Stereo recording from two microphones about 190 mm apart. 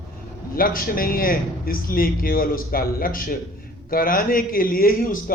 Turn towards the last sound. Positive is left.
turn(degrees=50)  # may be behind; listen again after turning